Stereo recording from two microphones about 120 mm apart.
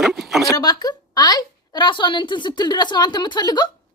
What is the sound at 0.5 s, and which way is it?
A woman's voice, 35° left (ahead or behind).